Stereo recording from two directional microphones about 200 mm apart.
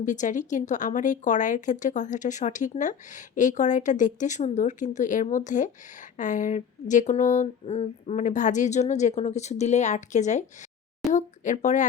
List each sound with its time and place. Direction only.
0.0 s a woman's voice: 40° left (ahead or behind)